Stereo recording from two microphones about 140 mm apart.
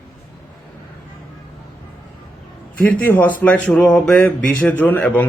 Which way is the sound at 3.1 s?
10° left (ahead or behind).